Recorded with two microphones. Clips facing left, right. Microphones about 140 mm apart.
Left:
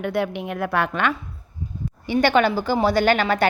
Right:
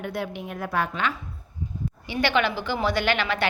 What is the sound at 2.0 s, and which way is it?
A woman's voice, 45° left (ahead or behind).